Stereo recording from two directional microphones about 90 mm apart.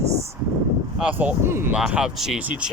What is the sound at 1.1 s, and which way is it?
Speech, 25° right (ahead or behind).